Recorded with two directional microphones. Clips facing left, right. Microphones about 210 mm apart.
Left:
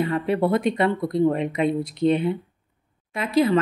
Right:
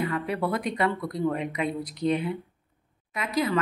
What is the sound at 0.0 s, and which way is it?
A woman's voice, 25° left (ahead or behind).